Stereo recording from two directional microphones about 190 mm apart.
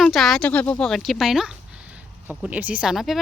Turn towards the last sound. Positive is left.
turn(degrees=0)  # may be behind; listen again after turning